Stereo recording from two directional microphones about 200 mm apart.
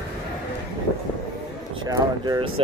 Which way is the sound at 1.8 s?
20° right (ahead or behind).